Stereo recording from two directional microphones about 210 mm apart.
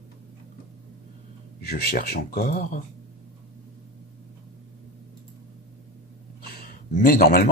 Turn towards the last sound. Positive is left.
turn(degrees=45)  # may be behind; listen again after turning